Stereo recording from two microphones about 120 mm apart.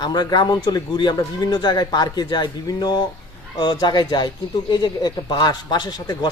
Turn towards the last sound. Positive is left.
turn(degrees=35)  # may be behind; listen again after turning